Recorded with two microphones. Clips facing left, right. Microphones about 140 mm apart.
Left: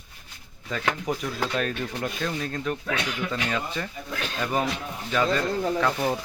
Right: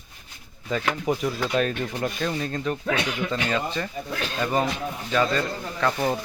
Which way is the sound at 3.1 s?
25° right (ahead or behind).